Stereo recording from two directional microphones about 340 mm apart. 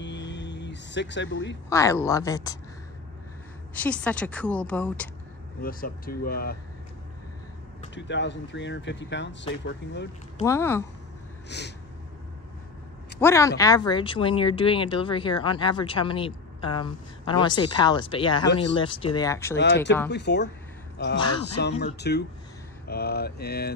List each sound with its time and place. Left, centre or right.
0.0 s a sound: left
1.7 s speech: centre
3.7 s a woman's voice: centre
5.6 s mantra: left
7.9 s speech: left
10.4 s speech: centre
11.4 s mantra: left
13.2 s speech: centre
19.5 s speech: left
21.0 s mantra: left